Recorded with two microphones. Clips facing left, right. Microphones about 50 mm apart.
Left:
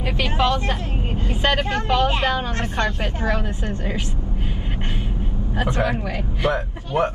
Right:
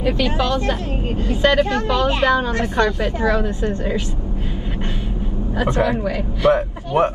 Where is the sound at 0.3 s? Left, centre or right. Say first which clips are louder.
Right 1 dB; left.